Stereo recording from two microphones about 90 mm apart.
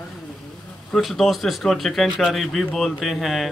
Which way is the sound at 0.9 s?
Centre (ahead or behind).